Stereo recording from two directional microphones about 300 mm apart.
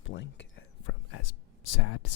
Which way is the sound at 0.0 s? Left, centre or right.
Left.